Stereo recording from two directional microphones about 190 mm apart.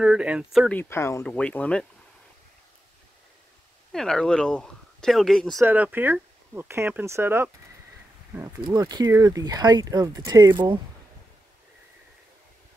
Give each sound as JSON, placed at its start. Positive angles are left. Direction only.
{"t": 0.0, "sound": "speech", "side_deg": -5}
{"t": 3.9, "sound": "speech", "side_deg": 0}
{"t": 5.6, "sound": "speech", "side_deg": -10}